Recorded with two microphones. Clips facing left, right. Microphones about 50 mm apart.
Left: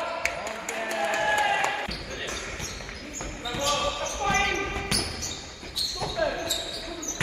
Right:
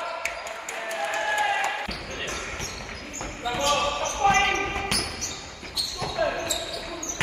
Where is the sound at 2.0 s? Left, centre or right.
Right.